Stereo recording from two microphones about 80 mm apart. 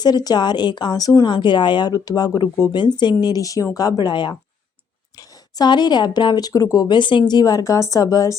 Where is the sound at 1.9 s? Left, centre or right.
Left.